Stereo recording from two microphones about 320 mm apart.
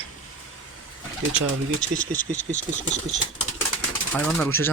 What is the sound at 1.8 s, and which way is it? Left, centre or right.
Speech, left.